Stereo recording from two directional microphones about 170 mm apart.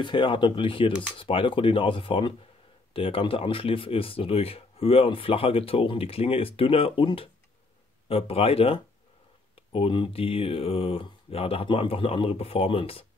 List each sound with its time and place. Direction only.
0.0 s speech: 30° left (ahead or behind)